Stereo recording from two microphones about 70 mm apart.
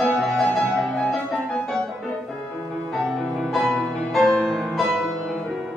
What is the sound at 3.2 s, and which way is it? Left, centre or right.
Music, centre.